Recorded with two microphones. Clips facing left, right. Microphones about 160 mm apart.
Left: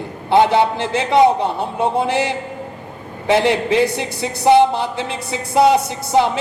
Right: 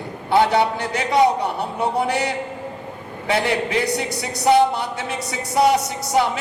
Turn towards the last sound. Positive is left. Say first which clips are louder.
# left 4 dB
turn(degrees=25)  # may be behind; listen again after turning